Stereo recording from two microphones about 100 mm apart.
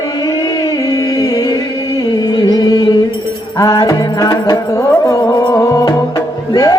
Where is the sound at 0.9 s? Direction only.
40° left (ahead or behind).